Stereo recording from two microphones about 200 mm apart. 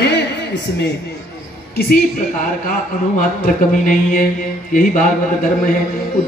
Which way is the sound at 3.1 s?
45° left (ahead or behind).